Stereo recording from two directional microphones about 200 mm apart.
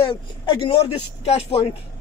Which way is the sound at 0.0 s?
25° left (ahead or behind).